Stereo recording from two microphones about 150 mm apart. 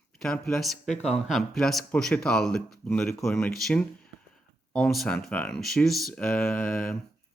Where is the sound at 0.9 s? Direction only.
50° left (ahead or behind).